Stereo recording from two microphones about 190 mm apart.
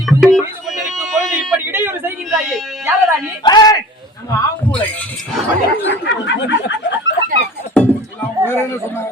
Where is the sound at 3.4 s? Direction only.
20° left (ahead or behind).